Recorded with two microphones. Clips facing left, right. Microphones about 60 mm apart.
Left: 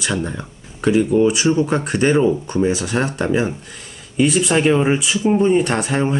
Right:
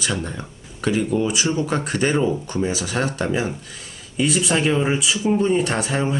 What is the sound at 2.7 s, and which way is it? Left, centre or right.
Speech, left.